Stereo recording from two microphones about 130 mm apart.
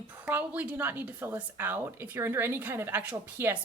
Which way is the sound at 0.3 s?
15° right (ahead or behind).